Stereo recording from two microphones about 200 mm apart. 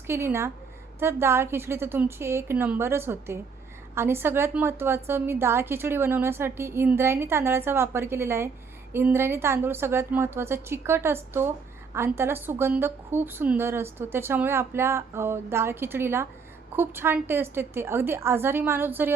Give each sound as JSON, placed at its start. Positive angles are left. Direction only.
{"t": 0.1, "sound": "a woman's voice", "side_deg": -10}